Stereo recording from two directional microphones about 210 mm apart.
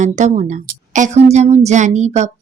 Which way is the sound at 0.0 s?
35° right (ahead or behind).